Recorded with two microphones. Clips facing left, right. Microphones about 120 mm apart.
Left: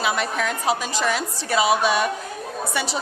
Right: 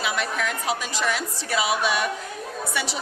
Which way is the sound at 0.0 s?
35° left (ahead or behind).